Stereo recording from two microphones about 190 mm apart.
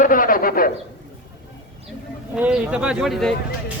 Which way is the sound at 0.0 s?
45° left (ahead or behind).